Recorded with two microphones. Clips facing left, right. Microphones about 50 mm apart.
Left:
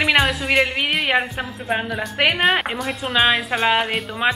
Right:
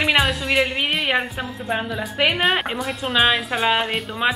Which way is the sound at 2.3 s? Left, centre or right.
Centre.